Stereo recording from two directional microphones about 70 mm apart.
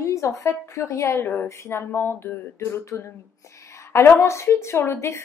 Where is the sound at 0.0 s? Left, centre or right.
Left.